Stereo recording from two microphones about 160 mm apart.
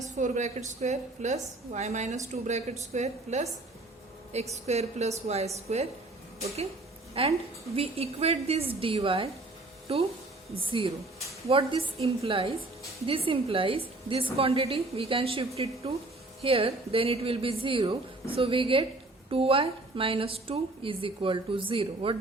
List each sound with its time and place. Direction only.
0.2 s a woman's voice: 50° right (ahead or behind)
7.1 s a woman's voice: 35° right (ahead or behind)